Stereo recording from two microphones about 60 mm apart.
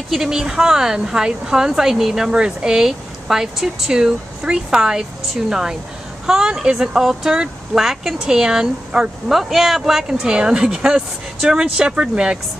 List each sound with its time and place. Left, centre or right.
0.1 s speech: centre